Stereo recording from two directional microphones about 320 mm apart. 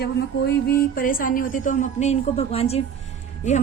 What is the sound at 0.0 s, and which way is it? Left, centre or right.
Speech, left.